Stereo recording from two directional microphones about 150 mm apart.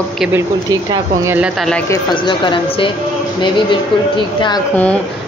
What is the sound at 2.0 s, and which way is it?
A woman's voice, 30° left (ahead or behind).